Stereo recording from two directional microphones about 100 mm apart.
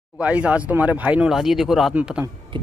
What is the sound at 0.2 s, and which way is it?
Speech, 10° right (ahead or behind).